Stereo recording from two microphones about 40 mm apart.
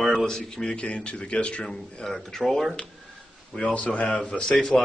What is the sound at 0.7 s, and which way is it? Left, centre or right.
Speech, left.